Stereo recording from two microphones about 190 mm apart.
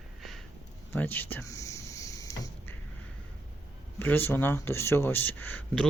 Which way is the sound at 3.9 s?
10° left (ahead or behind).